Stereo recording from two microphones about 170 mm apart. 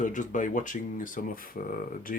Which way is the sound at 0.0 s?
50° left (ahead or behind).